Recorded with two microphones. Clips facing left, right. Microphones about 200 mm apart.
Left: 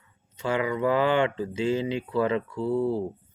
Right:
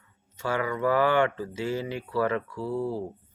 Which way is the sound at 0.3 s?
20° left (ahead or behind).